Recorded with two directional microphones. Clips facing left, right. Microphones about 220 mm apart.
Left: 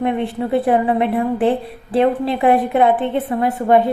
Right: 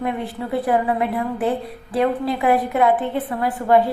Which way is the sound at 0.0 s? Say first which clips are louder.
Left 6 dB; 25° left (ahead or behind).